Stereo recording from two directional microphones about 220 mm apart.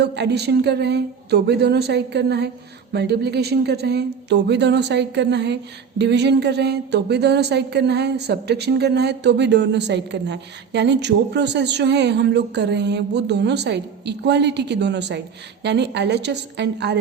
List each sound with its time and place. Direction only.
0.0 s speech: 50° right (ahead or behind)